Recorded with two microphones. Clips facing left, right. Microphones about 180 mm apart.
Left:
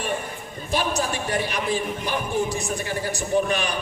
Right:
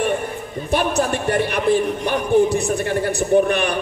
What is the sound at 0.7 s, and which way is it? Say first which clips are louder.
A man's voice: right 5 dB; 60° right (ahead or behind).